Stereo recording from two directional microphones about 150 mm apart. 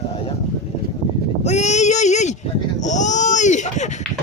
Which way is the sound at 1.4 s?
50° left (ahead or behind).